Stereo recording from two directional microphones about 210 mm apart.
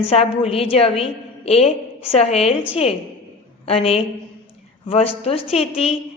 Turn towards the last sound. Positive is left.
turn(degrees=30)  # may be behind; listen again after turning